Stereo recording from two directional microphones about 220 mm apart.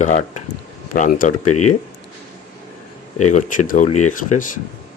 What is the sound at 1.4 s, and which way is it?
Speech, 90° left.